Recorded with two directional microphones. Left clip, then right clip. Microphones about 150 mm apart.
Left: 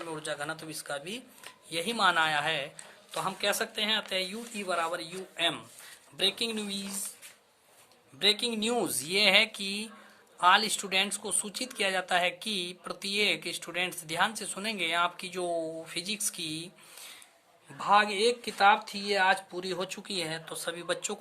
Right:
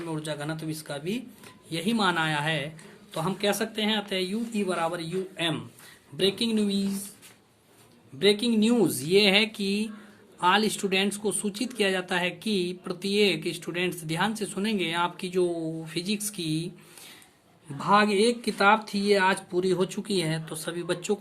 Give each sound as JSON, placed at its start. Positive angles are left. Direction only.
{"t": 0.1, "sound": "speech", "side_deg": 25}
{"t": 8.2, "sound": "speech", "side_deg": 30}
{"t": 17.7, "sound": "speech", "side_deg": 20}